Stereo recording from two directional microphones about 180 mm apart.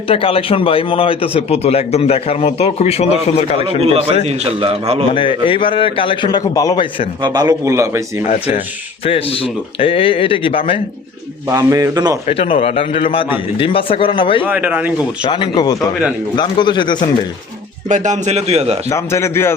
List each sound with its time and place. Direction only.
0.1 s speech: 30° left (ahead or behind)
3.8 s a man's voice: 35° right (ahead or behind)
5.0 s a man's voice: 30° left (ahead or behind)
7.2 s a man's voice: 25° right (ahead or behind)
8.3 s speech: 40° left (ahead or behind)
11.5 s a man's voice: 20° right (ahead or behind)
12.3 s speech: 30° left (ahead or behind)
14.4 s speech: 10° right (ahead or behind)
15.2 s a man's voice: 25° left (ahead or behind)
17.8 s a man's voice: 45° right (ahead or behind)
18.9 s a man's voice: 15° left (ahead or behind)